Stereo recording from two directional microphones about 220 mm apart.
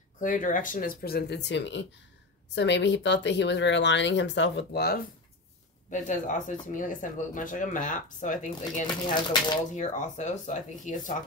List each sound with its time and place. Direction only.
0.2 s speech: 35° left (ahead or behind)
5.9 s speech: 35° left (ahead or behind)